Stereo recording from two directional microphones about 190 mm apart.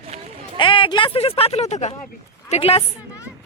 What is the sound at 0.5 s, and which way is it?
A woman's voice, 25° left (ahead or behind).